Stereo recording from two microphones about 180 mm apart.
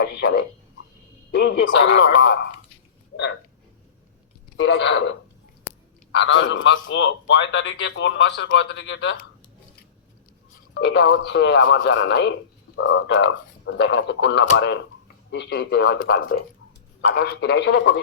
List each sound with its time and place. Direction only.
0.0 s speech: 65° left (ahead or behind)
4.5 s a man's voice: 75° left (ahead or behind)
10.8 s speech: 75° left (ahead or behind)
12.7 s a man's voice: 90° left
15.3 s speech: 65° left (ahead or behind)